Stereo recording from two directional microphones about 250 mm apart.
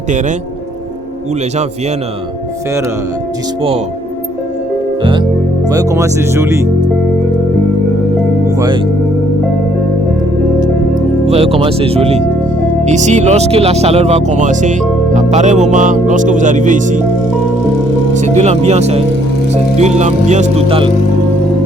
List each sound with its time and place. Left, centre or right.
5.6 s speech: centre
8.5 s speech: centre
11.3 s speech: right
18.1 s speech: right